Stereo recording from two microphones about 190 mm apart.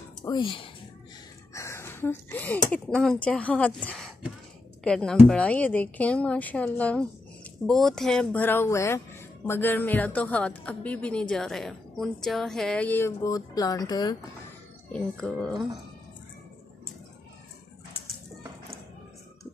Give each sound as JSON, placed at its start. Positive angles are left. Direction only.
{"t": 0.2, "sound": "speech", "side_deg": 25}
{"t": 1.5, "sound": "speech", "side_deg": 15}
{"t": 14.9, "sound": "speech", "side_deg": 5}